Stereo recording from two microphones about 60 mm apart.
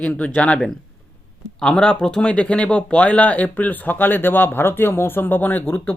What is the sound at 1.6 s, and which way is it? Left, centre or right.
Speech, centre.